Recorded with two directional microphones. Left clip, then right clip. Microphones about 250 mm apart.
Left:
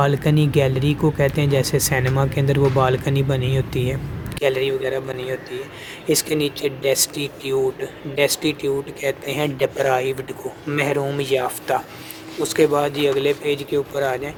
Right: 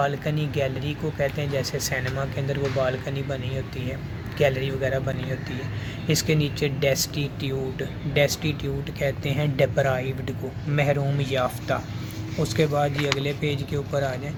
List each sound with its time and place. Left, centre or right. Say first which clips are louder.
0.0 s speech: left 6 dB; left
6.1 s speech: left 5 dB; left